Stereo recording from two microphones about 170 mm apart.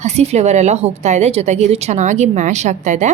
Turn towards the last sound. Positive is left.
turn(degrees=-45)  # may be behind; listen again after turning